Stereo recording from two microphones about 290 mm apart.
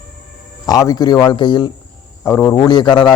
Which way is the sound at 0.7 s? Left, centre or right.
Centre.